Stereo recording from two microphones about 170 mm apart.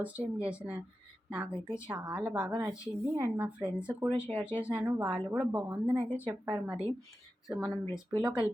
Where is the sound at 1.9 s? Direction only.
5° right (ahead or behind).